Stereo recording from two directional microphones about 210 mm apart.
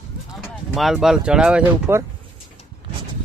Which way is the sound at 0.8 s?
Centre (ahead or behind).